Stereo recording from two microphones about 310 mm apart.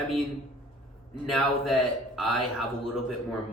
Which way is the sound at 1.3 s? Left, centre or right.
Centre.